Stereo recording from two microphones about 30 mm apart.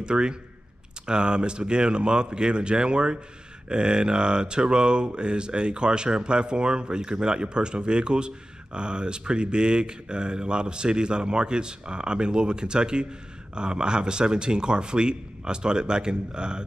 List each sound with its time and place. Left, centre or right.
0.0 s mantra: right
13.6 s speech: right